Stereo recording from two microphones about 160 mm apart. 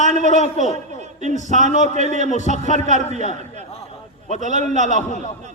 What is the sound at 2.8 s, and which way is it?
Speech, 45° right (ahead or behind).